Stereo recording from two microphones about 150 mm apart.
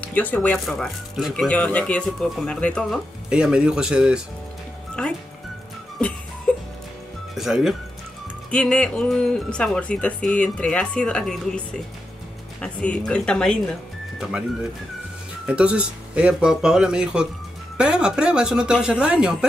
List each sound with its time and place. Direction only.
0.0 s speech: 10° left (ahead or behind)
3.3 s speech: 5° right (ahead or behind)
5.0 s speech: 5° left (ahead or behind)
6.5 s music: 10° left (ahead or behind)
7.3 s speech: centre (ahead or behind)
15.4 s speech: 5° right (ahead or behind)